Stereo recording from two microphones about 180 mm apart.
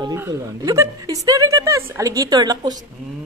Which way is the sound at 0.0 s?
20° right (ahead or behind).